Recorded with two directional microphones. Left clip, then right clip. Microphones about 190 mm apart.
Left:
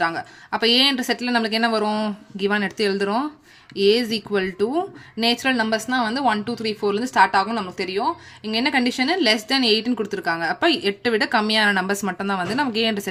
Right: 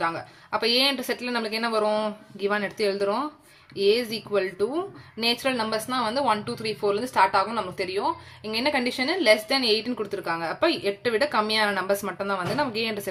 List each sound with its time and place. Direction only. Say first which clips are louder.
0.0 s speech: left 5 dB; 35° left (ahead or behind)